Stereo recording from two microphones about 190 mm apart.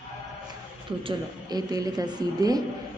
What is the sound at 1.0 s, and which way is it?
Speech, 20° right (ahead or behind).